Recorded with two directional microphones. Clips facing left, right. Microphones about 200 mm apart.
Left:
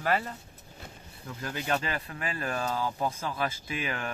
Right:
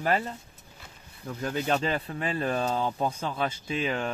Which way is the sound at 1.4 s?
25° right (ahead or behind).